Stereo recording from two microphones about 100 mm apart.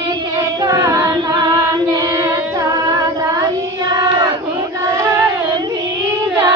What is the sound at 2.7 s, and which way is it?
Music, 50° right (ahead or behind).